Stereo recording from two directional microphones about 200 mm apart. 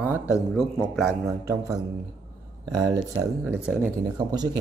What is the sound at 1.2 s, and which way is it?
A man's voice, 15° right (ahead or behind).